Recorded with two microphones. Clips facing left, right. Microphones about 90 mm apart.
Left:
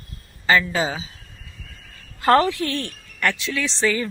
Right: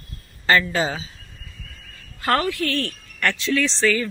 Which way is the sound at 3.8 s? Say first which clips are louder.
Left 1 dB; 20° left (ahead or behind).